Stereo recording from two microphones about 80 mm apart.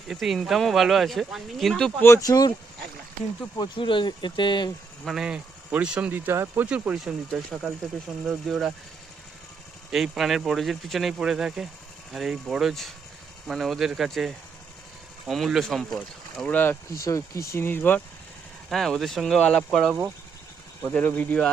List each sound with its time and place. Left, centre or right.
0.1 s speech: centre
2.0 s speech: left
2.2 s speech: left
3.6 s speech: left
5.0 s speech: centre
6.1 s speech: right
7.3 s speech: centre
9.9 s speech: centre
16.4 s speech: left
17.0 s speech: left
18.7 s speech: centre
20.8 s speech: left